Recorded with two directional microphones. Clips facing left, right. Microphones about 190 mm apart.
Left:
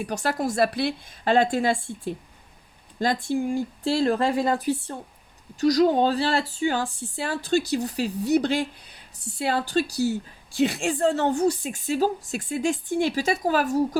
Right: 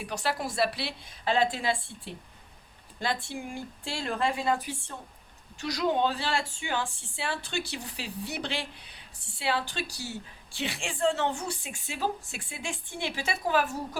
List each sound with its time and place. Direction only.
0.0 s a woman's voice: 45° left (ahead or behind)
3.2 s a woman's voice: 40° left (ahead or behind)